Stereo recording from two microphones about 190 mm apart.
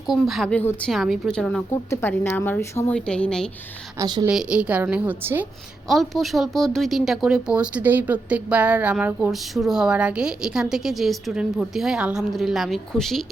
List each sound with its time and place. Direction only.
0.1 s a woman's voice: centre (ahead or behind)
3.9 s a woman's voice: 20° right (ahead or behind)
4.3 s a woman's voice: 5° right (ahead or behind)
5.9 s speech: centre (ahead or behind)